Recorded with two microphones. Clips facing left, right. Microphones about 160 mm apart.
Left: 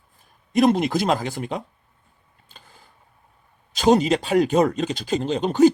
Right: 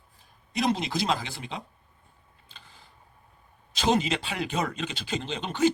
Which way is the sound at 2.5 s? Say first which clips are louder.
Left 3 dB; 45° left (ahead or behind).